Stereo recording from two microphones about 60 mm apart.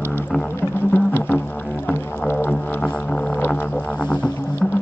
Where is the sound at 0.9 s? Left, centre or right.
Left.